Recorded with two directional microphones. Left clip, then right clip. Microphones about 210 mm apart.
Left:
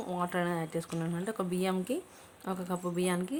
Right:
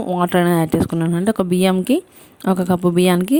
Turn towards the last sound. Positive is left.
turn(degrees=-45)  # may be behind; listen again after turning